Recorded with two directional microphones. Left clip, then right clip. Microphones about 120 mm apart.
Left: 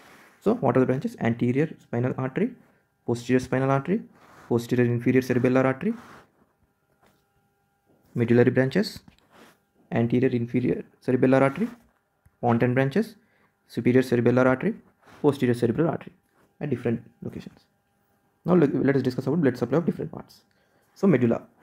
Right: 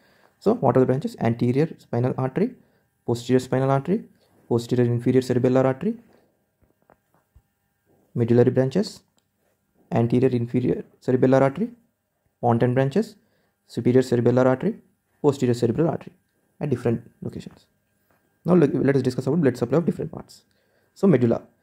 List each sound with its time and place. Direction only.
0.4 s speech: 30° right (ahead or behind)
8.1 s speech: 25° right (ahead or behind)